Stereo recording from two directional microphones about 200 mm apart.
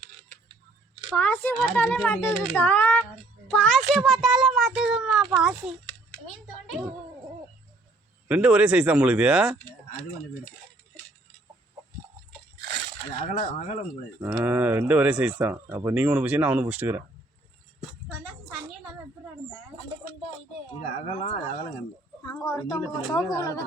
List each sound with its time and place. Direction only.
1.1 s a child's voice: 5° left (ahead or behind)
2.6 s a sound: 10° left (ahead or behind)
3.5 s a child's voice: 5° left (ahead or behind)
8.3 s a child's voice: 5° right (ahead or behind)
13.2 s speech: 40° left (ahead or behind)
14.2 s speech: 10° right (ahead or behind)
21.1 s speech: 30° left (ahead or behind)
22.4 s a woman's voice: 20° left (ahead or behind)